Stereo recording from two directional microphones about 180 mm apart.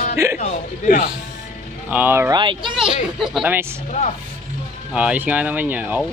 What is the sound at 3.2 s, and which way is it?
Speech, 5° right (ahead or behind).